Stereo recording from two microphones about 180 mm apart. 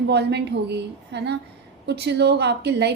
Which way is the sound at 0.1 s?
70° right (ahead or behind).